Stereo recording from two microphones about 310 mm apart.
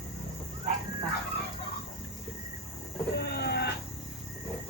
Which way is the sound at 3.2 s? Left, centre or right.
Left.